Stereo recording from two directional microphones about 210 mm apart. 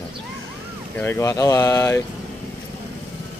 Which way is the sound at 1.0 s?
10° left (ahead or behind).